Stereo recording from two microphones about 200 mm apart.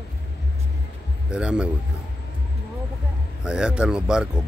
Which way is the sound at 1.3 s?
5° right (ahead or behind).